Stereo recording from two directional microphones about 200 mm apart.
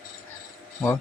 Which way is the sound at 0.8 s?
Centre (ahead or behind).